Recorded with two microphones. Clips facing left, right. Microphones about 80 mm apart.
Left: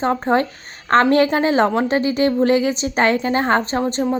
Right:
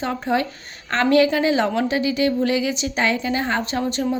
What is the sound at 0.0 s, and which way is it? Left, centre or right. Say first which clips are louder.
A woman's voice: left 5 dB; left.